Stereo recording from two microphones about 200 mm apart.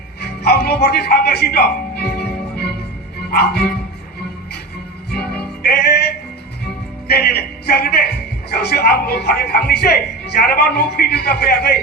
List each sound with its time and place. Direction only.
0.2 s music: 50° left (ahead or behind)
3.3 s a man's voice: 50° left (ahead or behind)
5.6 s music: 50° left (ahead or behind)
7.1 s a man's voice: 50° left (ahead or behind)